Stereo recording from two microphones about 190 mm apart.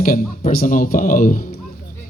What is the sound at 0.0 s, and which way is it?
Speech, 45° left (ahead or behind).